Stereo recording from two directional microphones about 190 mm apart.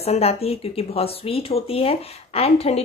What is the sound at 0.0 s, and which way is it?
Speech, 35° left (ahead or behind).